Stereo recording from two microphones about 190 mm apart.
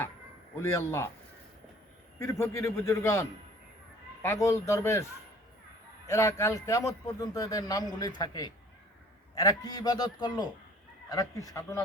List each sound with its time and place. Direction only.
0.6 s a man's voice: 15° left (ahead or behind)
2.1 s a man's voice: 15° left (ahead or behind)
6.1 s a man's voice: 15° left (ahead or behind)